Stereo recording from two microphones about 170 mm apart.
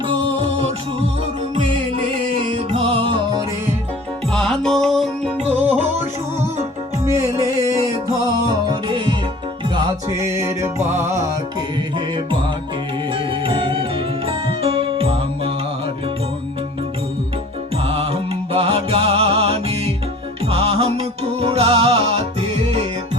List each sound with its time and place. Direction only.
0.1 s music: 30° right (ahead or behind)
4.3 s music: 5° left (ahead or behind)
5.5 s music: 10° right (ahead or behind)
7.0 s music: 15° right (ahead or behind)
11.9 s music: 30° right (ahead or behind)
17.8 s music: 35° right (ahead or behind)